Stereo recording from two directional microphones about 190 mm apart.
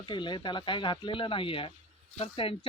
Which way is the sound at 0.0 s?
25° left (ahead or behind).